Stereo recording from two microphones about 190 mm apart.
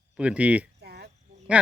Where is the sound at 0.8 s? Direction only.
55° right (ahead or behind).